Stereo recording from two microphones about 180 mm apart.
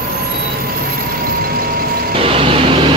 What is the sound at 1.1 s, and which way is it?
Vehicle, 55° right (ahead or behind).